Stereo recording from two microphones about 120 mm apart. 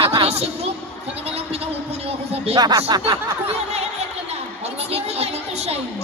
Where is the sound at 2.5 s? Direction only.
35° right (ahead or behind).